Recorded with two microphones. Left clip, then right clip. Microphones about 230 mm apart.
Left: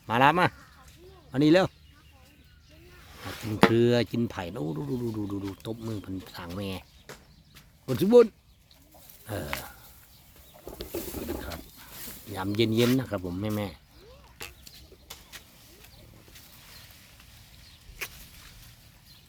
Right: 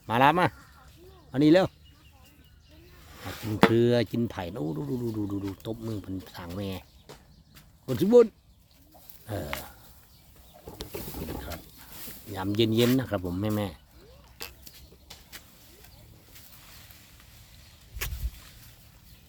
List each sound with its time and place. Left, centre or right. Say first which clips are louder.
0.1 s speech: even; centre
3.1 s speech: even; centre
7.1 s horse: left 3 dB; left
7.9 s speech: even; centre
12.3 s speech: right 1 dB; centre
14.3 s arrow: even; centre
15.1 s vehicle: left 2 dB; left
18.0 s a sound: even; centre